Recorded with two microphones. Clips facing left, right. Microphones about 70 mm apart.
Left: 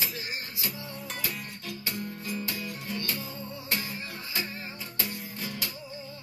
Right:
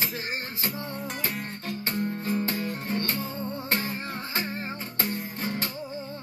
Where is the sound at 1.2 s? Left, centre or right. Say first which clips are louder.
Right 4 dB; right.